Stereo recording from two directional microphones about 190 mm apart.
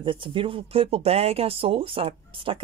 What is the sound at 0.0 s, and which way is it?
Speech, 25° right (ahead or behind).